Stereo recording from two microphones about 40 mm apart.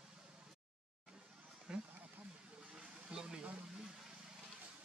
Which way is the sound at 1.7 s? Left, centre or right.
Right.